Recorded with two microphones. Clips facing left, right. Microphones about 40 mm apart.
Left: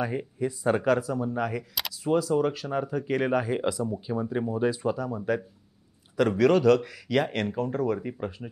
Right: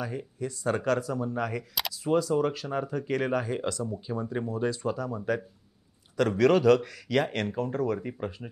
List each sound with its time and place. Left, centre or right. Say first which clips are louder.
0.0 s speech: left 5 dB; left; by 8.5 s centre